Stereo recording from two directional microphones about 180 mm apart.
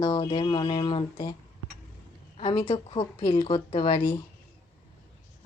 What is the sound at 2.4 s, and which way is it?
Speech, 30° left (ahead or behind).